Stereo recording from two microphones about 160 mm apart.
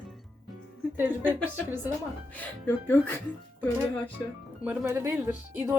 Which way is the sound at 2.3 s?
10° left (ahead or behind).